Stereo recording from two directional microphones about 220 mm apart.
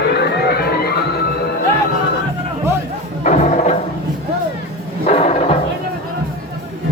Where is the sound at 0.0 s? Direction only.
50° left (ahead or behind).